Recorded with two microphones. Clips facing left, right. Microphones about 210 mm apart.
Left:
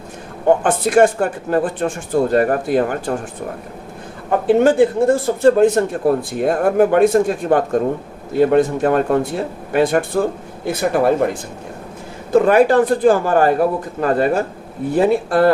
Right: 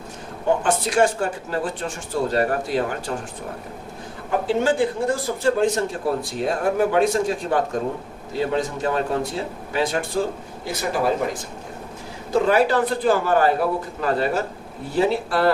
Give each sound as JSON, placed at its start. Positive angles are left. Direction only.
{"t": 0.4, "sound": "a man's voice", "side_deg": 55}
{"t": 4.3, "sound": "speech", "side_deg": 60}
{"t": 12.3, "sound": "a man's voice", "side_deg": 50}